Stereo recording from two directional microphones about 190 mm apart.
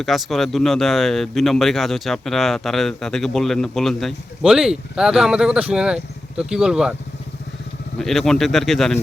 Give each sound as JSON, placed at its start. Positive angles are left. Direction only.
{"t": 0.0, "sound": "speech", "side_deg": 0}
{"t": 7.9, "sound": "speech", "side_deg": 0}